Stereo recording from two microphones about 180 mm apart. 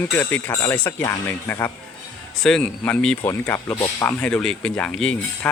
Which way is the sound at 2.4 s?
5° left (ahead or behind).